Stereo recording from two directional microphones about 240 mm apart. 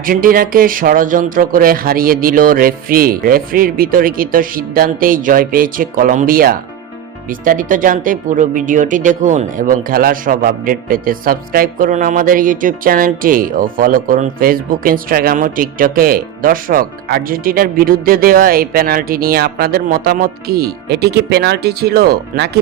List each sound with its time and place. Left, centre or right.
0.0 s speech: right